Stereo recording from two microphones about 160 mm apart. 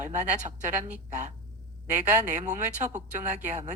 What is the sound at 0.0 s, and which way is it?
Speech, 50° right (ahead or behind).